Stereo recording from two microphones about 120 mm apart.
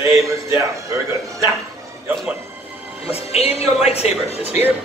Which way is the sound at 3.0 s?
55° left (ahead or behind).